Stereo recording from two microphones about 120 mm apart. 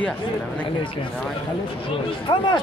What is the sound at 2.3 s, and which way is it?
Speech, 40° left (ahead or behind).